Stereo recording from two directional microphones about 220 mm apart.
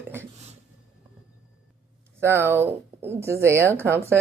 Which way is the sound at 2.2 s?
10° right (ahead or behind).